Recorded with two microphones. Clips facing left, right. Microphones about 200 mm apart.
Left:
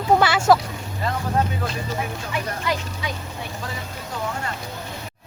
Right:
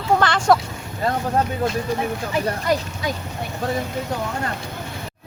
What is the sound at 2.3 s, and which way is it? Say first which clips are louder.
Speech: right 5 dB; 40° right (ahead or behind).